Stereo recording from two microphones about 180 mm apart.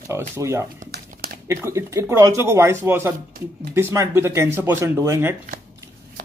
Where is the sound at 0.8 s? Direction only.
60° right (ahead or behind).